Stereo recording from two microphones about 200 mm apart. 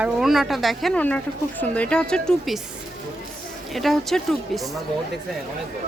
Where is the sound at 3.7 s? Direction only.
Centre (ahead or behind).